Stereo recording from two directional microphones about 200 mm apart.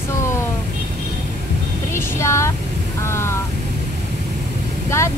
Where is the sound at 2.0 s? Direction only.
15° left (ahead or behind).